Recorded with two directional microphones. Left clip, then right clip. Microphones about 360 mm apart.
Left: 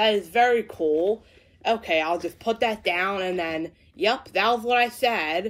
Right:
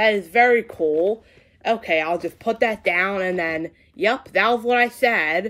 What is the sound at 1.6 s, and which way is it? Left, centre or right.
Speech, right.